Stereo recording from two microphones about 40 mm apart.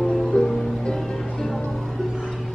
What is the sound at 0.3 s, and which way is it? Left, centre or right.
Music, centre.